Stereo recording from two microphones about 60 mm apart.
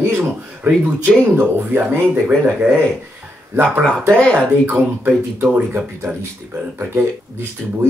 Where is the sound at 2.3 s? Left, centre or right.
Right.